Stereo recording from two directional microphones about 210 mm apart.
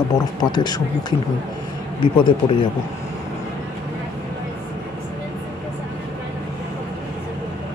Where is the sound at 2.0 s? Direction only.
25° left (ahead or behind).